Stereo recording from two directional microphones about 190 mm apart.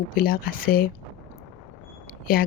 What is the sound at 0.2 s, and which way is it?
Speech, 50° left (ahead or behind).